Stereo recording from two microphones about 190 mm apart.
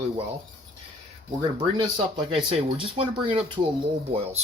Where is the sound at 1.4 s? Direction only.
25° right (ahead or behind).